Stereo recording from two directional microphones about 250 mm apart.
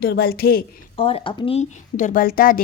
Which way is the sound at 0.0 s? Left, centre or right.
Left.